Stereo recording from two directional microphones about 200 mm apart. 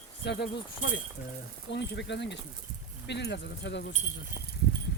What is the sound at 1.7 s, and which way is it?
Speech, 60° left (ahead or behind).